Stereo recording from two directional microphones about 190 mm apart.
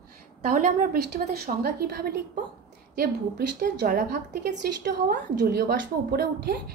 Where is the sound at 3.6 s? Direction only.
50° right (ahead or behind).